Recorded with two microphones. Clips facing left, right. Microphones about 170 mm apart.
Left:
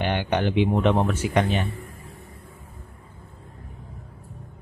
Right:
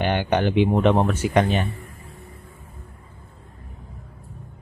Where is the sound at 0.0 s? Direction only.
45° right (ahead or behind).